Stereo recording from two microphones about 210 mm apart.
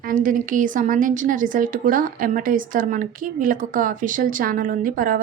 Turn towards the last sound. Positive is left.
turn(degrees=-40)  # may be behind; listen again after turning